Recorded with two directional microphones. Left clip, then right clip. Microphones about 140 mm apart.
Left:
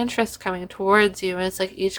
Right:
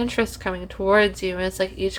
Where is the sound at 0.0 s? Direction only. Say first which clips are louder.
Even; 25° left (ahead or behind).